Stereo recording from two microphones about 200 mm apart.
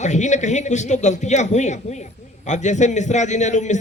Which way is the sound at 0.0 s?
35° left (ahead or behind).